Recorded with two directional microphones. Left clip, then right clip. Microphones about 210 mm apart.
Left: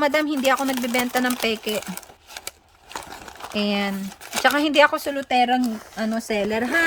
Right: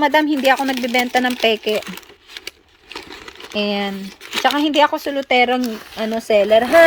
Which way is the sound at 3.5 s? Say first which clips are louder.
Right 4 dB; 5° left (ahead or behind).